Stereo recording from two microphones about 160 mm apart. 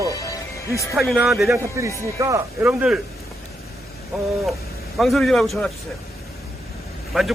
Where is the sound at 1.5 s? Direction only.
20° right (ahead or behind).